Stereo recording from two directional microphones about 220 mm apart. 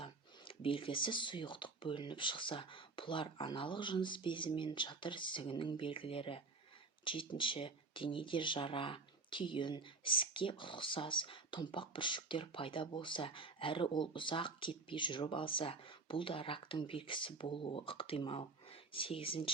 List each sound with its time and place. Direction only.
0.0 s speech: 25° left (ahead or behind)